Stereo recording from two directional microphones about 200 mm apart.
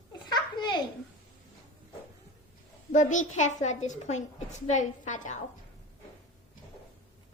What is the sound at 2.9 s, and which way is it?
A woman's voice, 40° left (ahead or behind).